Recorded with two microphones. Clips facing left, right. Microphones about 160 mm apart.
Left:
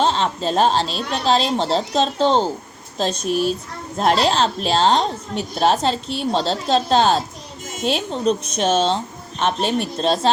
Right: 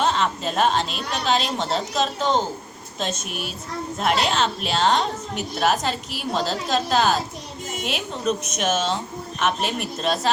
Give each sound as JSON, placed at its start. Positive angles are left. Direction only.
{"t": 0.0, "sound": "a woman's voice", "side_deg": 30}